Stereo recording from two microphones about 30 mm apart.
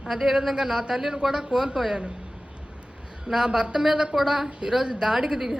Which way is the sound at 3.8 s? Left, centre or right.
Centre.